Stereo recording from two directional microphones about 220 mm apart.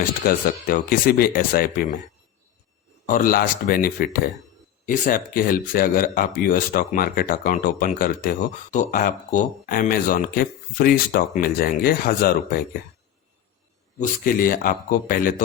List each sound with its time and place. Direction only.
0.0 s speech: 40° left (ahead or behind)
3.1 s speech: 40° left (ahead or behind)
14.0 s speech: 40° left (ahead or behind)